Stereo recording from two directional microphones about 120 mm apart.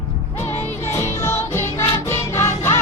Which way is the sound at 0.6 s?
20° left (ahead or behind).